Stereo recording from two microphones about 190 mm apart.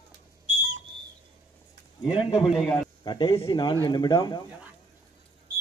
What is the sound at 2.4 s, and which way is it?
Speech, centre (ahead or behind).